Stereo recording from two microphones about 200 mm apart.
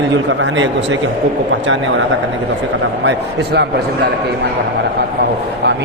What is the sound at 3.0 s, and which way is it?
Speech, 55° right (ahead or behind).